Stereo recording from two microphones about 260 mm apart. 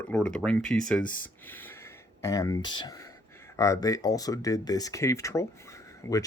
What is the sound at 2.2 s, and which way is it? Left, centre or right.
Speech, centre.